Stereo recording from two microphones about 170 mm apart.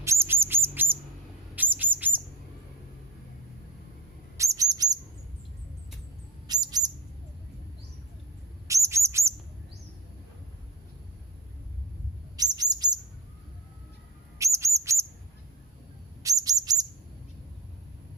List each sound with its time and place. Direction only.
0.0 s bird: 15° right (ahead or behind)
4.4 s chirp: 20° right (ahead or behind)
6.5 s bird: 25° right (ahead or behind)
8.6 s bird: 15° right (ahead or behind)
12.5 s chirp: 25° right (ahead or behind)
14.3 s chirp: 15° right (ahead or behind)
16.2 s bird: 20° right (ahead or behind)